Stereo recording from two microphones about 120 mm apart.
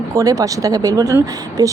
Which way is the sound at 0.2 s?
30° right (ahead or behind).